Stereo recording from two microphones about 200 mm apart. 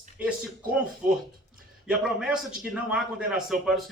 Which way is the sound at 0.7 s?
5° right (ahead or behind).